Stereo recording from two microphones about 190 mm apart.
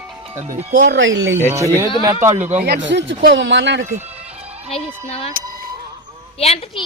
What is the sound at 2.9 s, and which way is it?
Speech, 65° right (ahead or behind).